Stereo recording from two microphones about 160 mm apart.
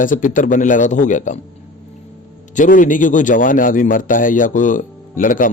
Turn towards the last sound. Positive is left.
turn(degrees=55)  # may be behind; listen again after turning